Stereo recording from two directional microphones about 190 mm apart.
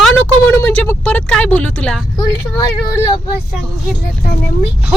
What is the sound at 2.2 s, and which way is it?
Speech, 20° left (ahead or behind).